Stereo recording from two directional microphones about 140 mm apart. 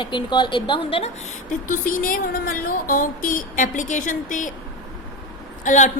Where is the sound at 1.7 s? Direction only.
75° left (ahead or behind).